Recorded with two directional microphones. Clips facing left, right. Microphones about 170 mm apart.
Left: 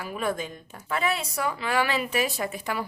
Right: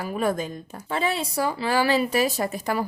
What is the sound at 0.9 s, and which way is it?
Speech, 30° right (ahead or behind).